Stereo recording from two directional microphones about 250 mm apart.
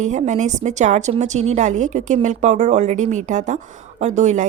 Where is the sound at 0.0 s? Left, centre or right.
Right.